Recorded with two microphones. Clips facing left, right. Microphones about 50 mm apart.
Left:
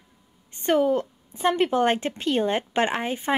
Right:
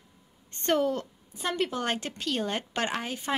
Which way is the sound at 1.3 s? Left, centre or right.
Left.